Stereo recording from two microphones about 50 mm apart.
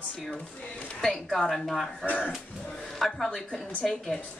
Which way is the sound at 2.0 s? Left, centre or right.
Left.